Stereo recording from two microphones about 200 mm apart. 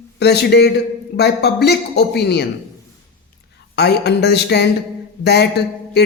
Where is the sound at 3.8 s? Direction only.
55° left (ahead or behind).